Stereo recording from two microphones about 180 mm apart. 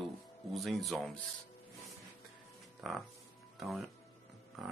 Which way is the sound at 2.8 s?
Centre (ahead or behind).